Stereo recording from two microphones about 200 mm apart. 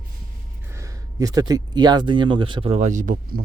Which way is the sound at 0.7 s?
15° right (ahead or behind).